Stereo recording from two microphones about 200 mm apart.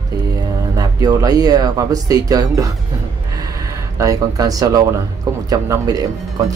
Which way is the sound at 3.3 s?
15° right (ahead or behind).